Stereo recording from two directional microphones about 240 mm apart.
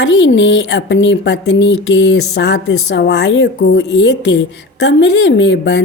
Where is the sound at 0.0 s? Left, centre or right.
Left.